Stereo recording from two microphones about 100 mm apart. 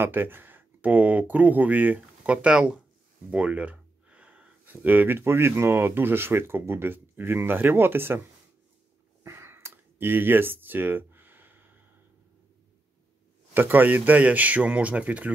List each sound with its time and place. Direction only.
0.0 s speech: 20° right (ahead or behind)
9.2 s a sound: 25° right (ahead or behind)
13.5 s speech: 20° right (ahead or behind)